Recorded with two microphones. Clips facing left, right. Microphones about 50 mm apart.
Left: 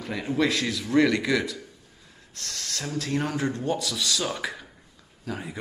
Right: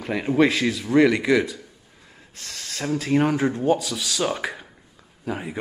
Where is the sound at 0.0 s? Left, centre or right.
Right.